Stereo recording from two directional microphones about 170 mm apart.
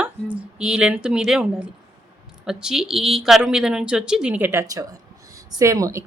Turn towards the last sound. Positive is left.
turn(degrees=-20)  # may be behind; listen again after turning